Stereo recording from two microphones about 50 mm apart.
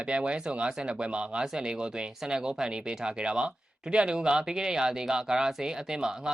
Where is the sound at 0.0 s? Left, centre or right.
Right.